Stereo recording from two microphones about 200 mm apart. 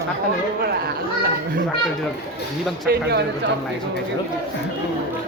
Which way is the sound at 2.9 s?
55° right (ahead or behind).